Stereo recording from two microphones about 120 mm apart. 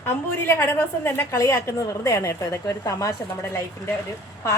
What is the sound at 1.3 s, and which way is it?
Speech, 25° left (ahead or behind).